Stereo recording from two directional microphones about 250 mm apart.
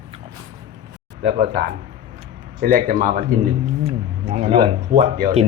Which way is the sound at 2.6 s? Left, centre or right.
Right.